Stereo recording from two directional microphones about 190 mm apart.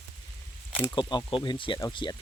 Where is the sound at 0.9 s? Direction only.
25° left (ahead or behind).